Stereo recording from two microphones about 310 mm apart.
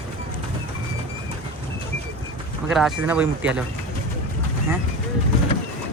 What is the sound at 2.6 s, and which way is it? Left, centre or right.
Speech, centre.